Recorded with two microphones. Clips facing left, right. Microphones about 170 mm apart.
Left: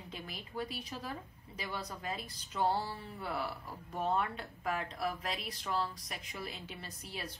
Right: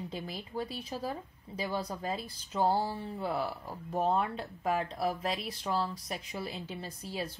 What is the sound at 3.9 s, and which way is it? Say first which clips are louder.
Speech: right 4 dB; 35° right (ahead or behind).